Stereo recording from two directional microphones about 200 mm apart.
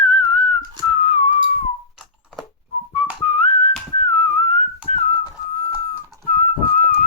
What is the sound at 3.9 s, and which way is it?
Whistling, 35° left (ahead or behind).